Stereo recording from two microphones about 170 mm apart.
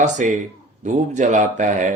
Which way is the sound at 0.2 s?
45° right (ahead or behind).